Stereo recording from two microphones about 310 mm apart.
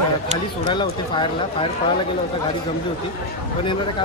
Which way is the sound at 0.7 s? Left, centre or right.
Centre.